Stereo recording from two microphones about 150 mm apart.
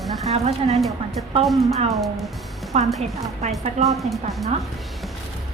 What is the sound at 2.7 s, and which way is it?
Speech, 45° right (ahead or behind).